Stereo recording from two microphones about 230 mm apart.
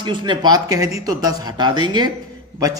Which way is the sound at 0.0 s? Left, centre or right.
Centre.